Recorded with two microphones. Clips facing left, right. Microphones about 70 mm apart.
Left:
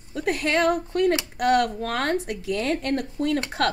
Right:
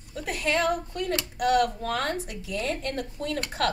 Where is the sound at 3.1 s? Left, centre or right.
Left.